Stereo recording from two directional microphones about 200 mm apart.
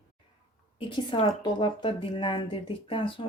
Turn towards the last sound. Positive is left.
turn(degrees=25)  # may be behind; listen again after turning